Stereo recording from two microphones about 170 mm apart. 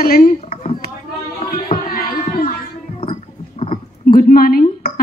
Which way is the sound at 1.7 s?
55° left (ahead or behind).